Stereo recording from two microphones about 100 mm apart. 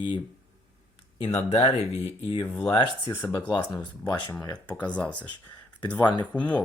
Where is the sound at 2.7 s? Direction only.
55° left (ahead or behind).